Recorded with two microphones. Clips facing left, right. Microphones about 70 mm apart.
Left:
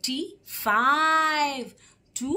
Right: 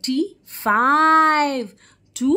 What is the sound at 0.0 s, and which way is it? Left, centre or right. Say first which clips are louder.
Speech: right 10 dB; right.